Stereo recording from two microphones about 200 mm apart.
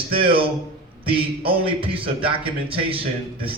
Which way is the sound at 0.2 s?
25° right (ahead or behind).